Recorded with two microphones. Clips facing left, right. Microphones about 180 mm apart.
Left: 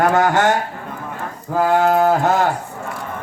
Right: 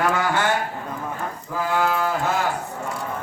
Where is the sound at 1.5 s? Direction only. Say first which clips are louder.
Left 8 dB; 50° left (ahead or behind).